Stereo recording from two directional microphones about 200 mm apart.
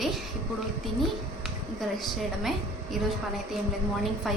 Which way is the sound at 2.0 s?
Centre (ahead or behind).